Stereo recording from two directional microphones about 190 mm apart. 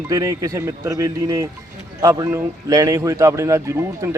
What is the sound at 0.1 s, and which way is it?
A man's voice, 20° right (ahead or behind).